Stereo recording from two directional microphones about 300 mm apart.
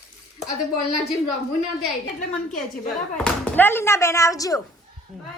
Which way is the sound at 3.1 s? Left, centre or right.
Centre.